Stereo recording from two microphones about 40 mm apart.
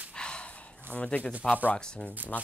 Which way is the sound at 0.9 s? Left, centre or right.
Left.